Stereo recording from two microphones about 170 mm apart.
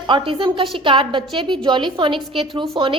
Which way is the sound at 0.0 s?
30° right (ahead or behind).